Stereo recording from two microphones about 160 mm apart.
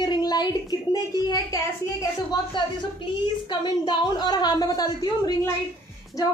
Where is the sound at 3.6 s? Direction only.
25° left (ahead or behind).